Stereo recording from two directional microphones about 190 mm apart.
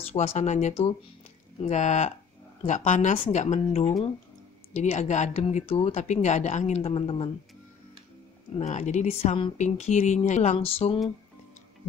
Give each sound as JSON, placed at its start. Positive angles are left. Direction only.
{"t": 0.1, "sound": "speech", "side_deg": 35}
{"t": 8.5, "sound": "speech", "side_deg": 35}